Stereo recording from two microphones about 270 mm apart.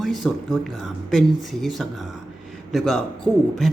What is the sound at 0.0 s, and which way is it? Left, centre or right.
Speech, centre.